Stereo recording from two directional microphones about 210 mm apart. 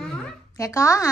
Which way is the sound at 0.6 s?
15° left (ahead or behind).